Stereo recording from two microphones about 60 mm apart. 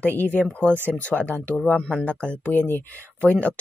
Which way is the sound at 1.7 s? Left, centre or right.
Centre.